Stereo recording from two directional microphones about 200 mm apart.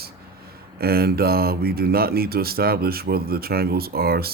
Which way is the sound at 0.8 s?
50° right (ahead or behind).